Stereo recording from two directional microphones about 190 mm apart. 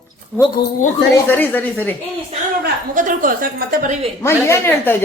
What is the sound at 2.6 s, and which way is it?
A woman's voice, 45° right (ahead or behind).